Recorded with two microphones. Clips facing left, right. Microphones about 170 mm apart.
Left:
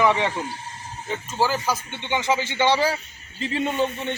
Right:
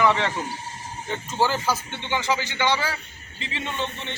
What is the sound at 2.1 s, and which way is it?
A man's voice, 20° left (ahead or behind).